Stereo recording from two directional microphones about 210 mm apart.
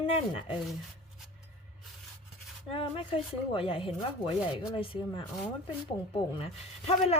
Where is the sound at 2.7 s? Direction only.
25° left (ahead or behind).